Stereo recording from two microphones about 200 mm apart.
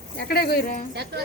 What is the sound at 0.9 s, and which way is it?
Speech, 55° right (ahead or behind).